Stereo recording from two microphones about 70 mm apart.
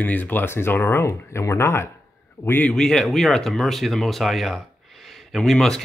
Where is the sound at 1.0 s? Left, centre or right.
Left.